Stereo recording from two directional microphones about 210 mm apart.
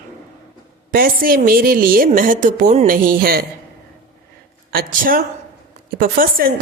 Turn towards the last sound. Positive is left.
turn(degrees=-40)  # may be behind; listen again after turning